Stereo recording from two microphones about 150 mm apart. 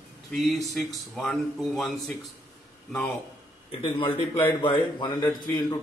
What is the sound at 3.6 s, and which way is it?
A man's voice, 40° left (ahead or behind).